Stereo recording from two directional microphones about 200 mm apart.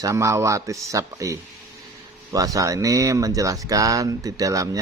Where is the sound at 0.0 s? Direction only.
15° right (ahead or behind).